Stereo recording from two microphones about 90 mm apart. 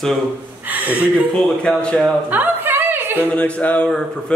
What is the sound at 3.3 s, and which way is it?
Speech, 15° left (ahead or behind).